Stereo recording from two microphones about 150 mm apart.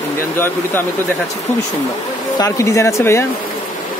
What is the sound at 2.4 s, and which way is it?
Speech, 20° left (ahead or behind).